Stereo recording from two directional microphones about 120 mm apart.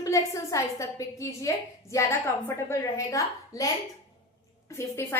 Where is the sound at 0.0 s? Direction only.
25° left (ahead or behind).